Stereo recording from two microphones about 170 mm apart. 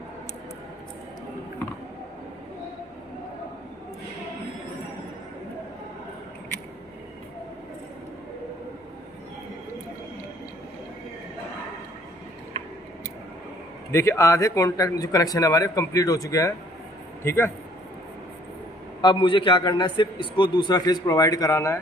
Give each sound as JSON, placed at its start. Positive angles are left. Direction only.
{"t": 13.9, "sound": "a man's voice", "side_deg": 15}
{"t": 19.0, "sound": "a man's voice", "side_deg": 30}